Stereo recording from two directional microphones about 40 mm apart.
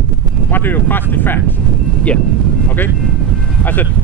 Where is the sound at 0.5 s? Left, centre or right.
Left.